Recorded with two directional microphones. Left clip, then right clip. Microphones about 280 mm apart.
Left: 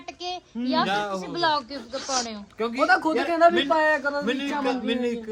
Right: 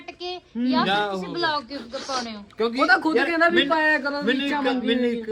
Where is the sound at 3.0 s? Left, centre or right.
Left.